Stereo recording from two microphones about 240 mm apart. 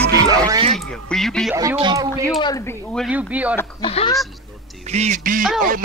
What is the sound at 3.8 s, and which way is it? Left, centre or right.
Speech, left.